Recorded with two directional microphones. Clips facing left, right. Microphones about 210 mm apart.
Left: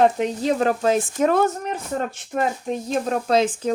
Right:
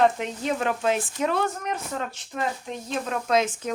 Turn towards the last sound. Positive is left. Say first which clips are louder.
# left 4 dB
turn(degrees=30)  # may be behind; listen again after turning